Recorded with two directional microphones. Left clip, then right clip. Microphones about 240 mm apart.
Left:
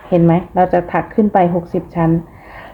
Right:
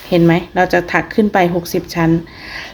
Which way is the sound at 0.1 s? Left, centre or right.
Centre.